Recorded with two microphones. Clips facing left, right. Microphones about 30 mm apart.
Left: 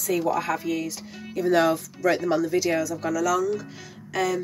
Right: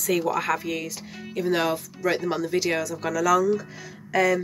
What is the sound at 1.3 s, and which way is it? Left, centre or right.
Speech, right.